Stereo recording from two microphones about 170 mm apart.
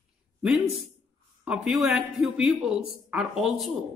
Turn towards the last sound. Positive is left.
turn(degrees=0)  # may be behind; listen again after turning